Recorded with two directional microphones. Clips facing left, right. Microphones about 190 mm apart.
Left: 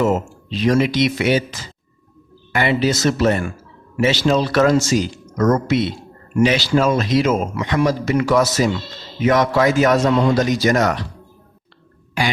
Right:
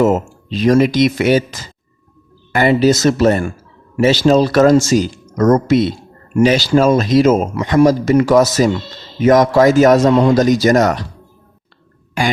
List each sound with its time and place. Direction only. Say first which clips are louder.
0.0 s a man's voice: right 4 dB; 45° right (ahead or behind)